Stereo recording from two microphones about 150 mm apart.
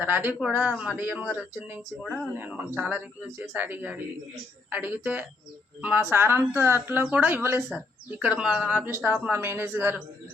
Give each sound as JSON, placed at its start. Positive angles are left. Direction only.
{"t": 0.0, "sound": "a man's voice", "side_deg": -10}